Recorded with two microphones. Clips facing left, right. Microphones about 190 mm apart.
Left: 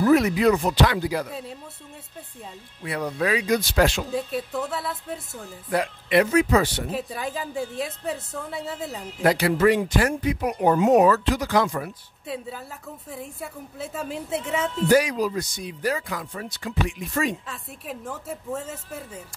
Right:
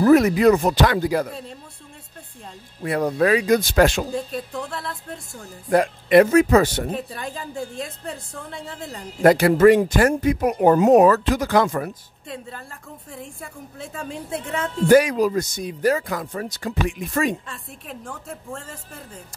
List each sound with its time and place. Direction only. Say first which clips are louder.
0.0 s speech: right 4 dB; 45° right (ahead or behind)
1.3 s a woman's voice: left 1 dB; 5° left (ahead or behind)
2.8 s speech: right 6 dB; 45° right (ahead or behind)
4.1 s a woman's voice: even; 5° left (ahead or behind)
5.7 s speech: right 7 dB; 45° right (ahead or behind)
6.9 s a woman's voice: even; 5° left (ahead or behind)
9.2 s speech: right 6 dB; 50° right (ahead or behind)
12.3 s a woman's voice: left 2 dB; 5° left (ahead or behind)
14.9 s speech: right 5 dB; 55° right (ahead or behind)
17.5 s a woman's voice: left 1 dB; 5° left (ahead or behind)